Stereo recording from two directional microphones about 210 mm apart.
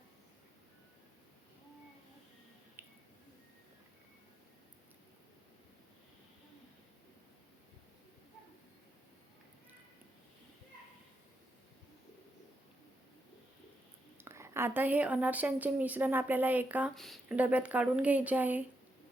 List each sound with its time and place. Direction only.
14.3 s a woman's voice: 10° right (ahead or behind)